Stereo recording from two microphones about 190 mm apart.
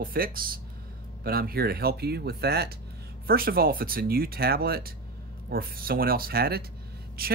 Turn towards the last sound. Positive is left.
turn(degrees=-55)  # may be behind; listen again after turning